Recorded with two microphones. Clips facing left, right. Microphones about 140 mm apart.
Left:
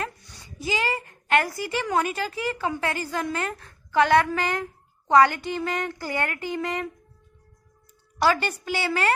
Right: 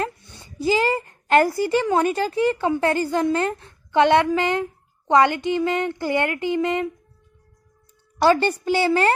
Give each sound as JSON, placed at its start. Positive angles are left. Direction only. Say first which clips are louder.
{"t": 0.0, "sound": "a woman's voice", "louder": "right 5 dB", "side_deg": -25}
{"t": 8.2, "sound": "speech", "louder": "right 5 dB", "side_deg": -30}